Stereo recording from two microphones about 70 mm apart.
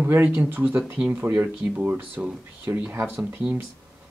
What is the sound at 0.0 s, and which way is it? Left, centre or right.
Speech, right.